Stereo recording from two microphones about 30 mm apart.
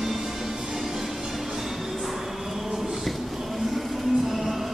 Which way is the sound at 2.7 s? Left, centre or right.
Centre.